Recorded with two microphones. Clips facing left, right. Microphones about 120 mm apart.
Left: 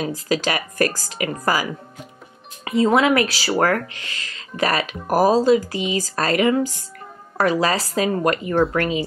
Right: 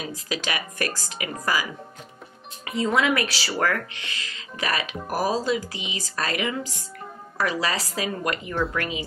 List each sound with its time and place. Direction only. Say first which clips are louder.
0.0 s speech: left 9 dB; 40° left (ahead or behind)
3.0 s speech: left 5 dB; 40° left (ahead or behind)